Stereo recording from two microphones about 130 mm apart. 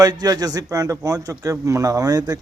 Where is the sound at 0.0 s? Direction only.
30° right (ahead or behind).